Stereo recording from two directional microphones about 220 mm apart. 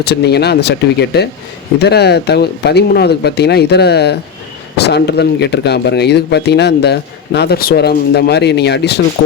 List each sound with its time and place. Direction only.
0.0 s speech: 50° left (ahead or behind)